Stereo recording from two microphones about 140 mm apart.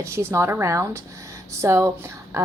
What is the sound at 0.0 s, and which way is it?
A woman's voice, 20° right (ahead or behind).